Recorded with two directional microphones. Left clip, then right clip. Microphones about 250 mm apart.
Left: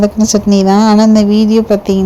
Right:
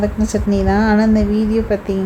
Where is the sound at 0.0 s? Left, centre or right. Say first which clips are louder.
Left 7 dB; left.